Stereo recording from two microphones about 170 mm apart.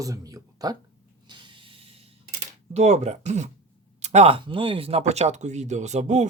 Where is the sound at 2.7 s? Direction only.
40° right (ahead or behind).